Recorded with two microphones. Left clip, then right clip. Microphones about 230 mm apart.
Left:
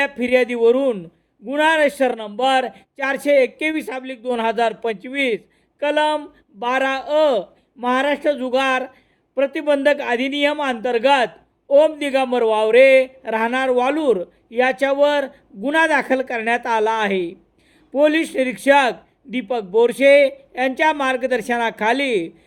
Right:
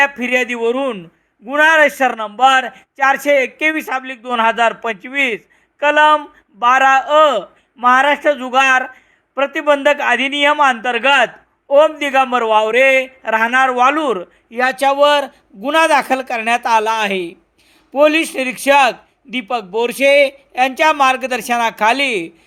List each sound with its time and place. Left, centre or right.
0.0 s a man's voice: centre
14.7 s a man's voice: centre